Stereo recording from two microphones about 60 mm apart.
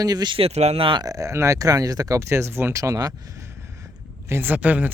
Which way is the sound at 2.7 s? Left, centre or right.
Right.